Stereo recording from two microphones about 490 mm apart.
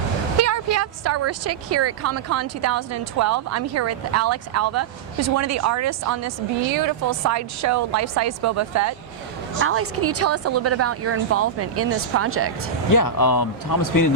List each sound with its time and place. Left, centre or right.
0.3 s a woman's voice: right
12.9 s speech: left